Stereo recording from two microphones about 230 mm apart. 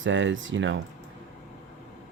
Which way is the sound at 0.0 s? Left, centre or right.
Right.